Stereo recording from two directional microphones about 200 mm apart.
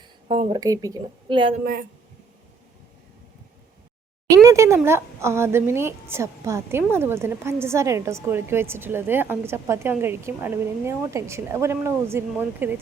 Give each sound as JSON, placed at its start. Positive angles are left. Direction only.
{"t": 0.3, "sound": "speech", "side_deg": -30}
{"t": 0.6, "sound": "a woman's voice", "side_deg": -15}
{"t": 1.6, "sound": "speech", "side_deg": -45}
{"t": 4.4, "sound": "a woman's voice", "side_deg": -15}